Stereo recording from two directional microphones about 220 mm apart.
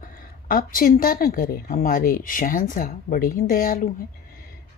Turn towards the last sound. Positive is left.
turn(degrees=40)  # may be behind; listen again after turning